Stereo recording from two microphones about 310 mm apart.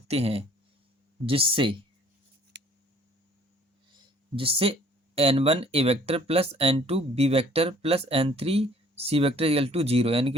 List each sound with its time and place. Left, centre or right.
0.1 s speech: centre
2.5 s a sound: right
4.4 s speech: centre